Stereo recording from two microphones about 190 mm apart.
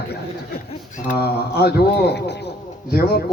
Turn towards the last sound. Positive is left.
turn(degrees=55)  # may be behind; listen again after turning